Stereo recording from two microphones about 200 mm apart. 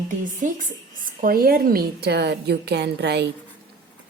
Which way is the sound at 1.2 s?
50° right (ahead or behind).